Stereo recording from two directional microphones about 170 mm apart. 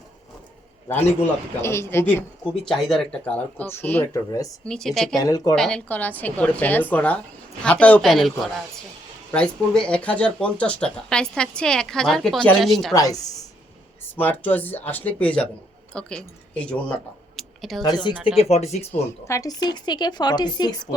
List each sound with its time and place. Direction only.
1.6 s speech: 15° left (ahead or behind)
2.5 s speech: centre (ahead or behind); by 4.5 s 20° left (ahead or behind)
4.6 s speech: 5° left (ahead or behind)
5.2 s speech: 20° left (ahead or behind)
5.5 s speech: 5° left (ahead or behind)
14.0 s speech: 10° left (ahead or behind)
17.3 s a sound: centre (ahead or behind)
17.8 s speech: 25° left (ahead or behind)
18.1 s speech: 5° right (ahead or behind)
18.3 s speech: 40° left (ahead or behind)
19.3 s speech: 20° left (ahead or behind)